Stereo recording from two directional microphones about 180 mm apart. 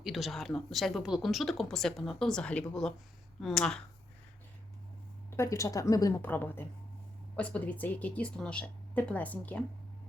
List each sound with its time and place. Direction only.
0.0 s speech: centre (ahead or behind)
5.4 s speech: 15° left (ahead or behind)